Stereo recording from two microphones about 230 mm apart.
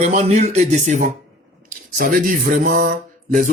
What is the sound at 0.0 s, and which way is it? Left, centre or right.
Speech, right.